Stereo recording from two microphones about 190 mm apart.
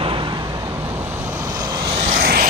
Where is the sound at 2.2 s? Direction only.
50° right (ahead or behind).